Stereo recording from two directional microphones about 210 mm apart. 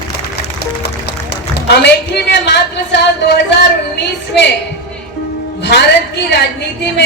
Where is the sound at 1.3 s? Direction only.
50° left (ahead or behind).